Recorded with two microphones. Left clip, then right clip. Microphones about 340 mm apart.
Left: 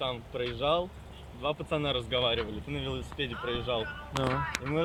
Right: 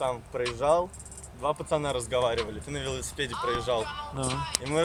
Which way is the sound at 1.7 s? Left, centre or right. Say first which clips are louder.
Right 2 dB; centre.